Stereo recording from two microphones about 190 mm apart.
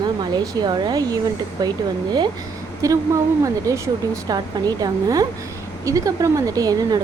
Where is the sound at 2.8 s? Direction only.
15° right (ahead or behind).